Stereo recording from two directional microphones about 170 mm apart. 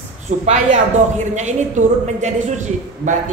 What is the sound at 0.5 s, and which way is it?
A man's voice, 45° right (ahead or behind).